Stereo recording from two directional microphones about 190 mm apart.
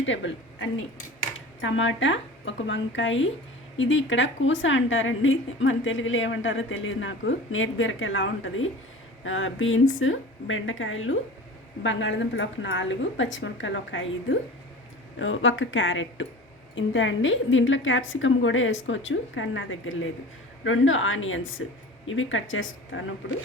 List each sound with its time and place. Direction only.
0.0 s speech: 75° left (ahead or behind)
1.6 s a woman's voice: 85° left
11.8 s a woman's voice: 80° left
16.7 s a woman's voice: 80° left